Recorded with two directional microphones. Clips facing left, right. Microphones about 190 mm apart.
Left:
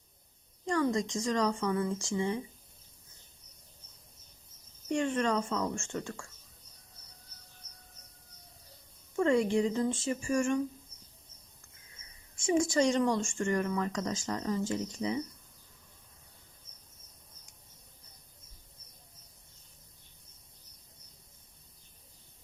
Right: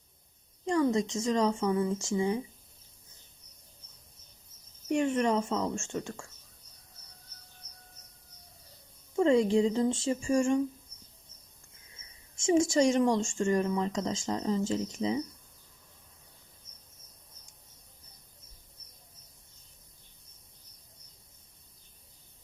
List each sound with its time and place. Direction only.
0.6 s a sound: 20° right (ahead or behind)
0.9 s speech: 25° right (ahead or behind)
4.9 s speech: 20° right (ahead or behind)
9.1 s speech: 20° right (ahead or behind)
12.4 s speech: 25° right (ahead or behind)
12.8 s speech: 10° right (ahead or behind)
13.4 s speech: 25° right (ahead or behind)